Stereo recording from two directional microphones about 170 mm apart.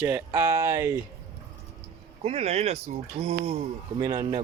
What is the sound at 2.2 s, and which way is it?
Speech, 40° right (ahead or behind).